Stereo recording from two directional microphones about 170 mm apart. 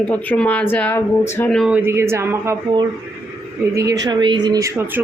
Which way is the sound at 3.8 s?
20° right (ahead or behind).